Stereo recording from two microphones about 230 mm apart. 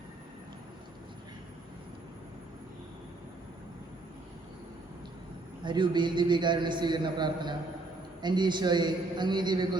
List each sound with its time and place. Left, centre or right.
5.6 s a man's voice: centre